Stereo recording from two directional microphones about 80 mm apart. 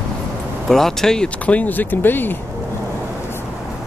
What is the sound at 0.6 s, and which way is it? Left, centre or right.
Speech, centre.